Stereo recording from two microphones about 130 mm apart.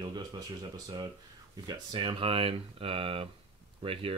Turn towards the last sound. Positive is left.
turn(degrees=-45)  # may be behind; listen again after turning